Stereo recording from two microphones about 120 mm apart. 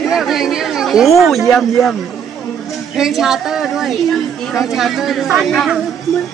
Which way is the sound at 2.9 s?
5° right (ahead or behind).